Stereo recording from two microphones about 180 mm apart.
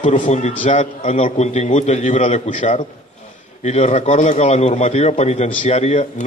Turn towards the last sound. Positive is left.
turn(degrees=40)  # may be behind; listen again after turning